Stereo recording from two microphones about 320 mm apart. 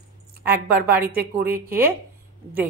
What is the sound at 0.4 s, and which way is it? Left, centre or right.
A woman's voice, centre.